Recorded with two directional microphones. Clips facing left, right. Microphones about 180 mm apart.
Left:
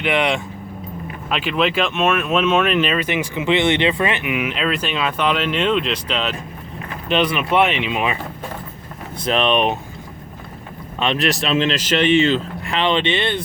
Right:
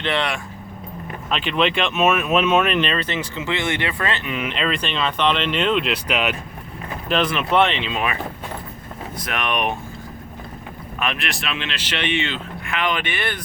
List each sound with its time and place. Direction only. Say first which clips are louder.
0.0 s speech: left 4 dB; 15° left (ahead or behind)
1.3 s speech: left 1 dB; 5° left (ahead or behind); by 6.3 s 10° right (ahead or behind)
7.1 s speech: left 2 dB; 5° left (ahead or behind); by 9.7 s 25° left (ahead or behind)
11.0 s speech: left 7 dB; 35° left (ahead or behind)